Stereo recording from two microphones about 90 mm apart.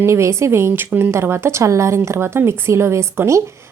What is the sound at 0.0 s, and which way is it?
A woman's voice, 30° right (ahead or behind).